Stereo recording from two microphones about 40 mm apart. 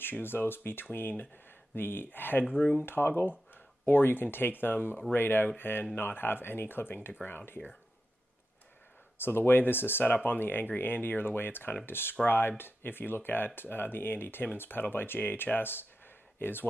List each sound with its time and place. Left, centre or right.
0.2 s speech: left
2.8 s speech: left
9.2 s speech: left